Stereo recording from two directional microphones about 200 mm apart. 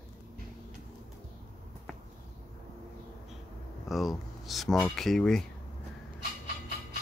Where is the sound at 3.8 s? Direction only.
Centre (ahead or behind).